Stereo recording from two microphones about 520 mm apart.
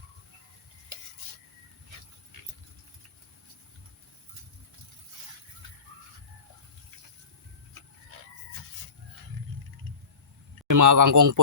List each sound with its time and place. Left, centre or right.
10.7 s a man's voice: right